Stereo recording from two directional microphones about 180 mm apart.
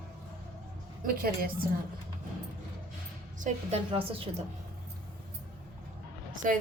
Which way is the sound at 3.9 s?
30° right (ahead or behind).